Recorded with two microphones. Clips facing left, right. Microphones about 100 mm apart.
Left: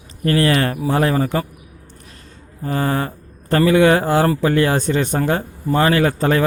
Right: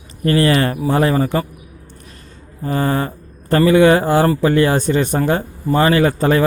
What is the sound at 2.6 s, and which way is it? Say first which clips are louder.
Speech: right 2 dB; centre (ahead or behind).